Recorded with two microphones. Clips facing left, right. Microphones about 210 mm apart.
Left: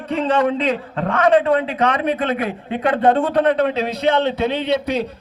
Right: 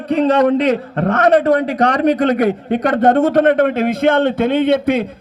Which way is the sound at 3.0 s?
45° right (ahead or behind).